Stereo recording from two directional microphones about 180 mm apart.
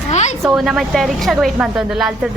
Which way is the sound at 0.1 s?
40° left (ahead or behind).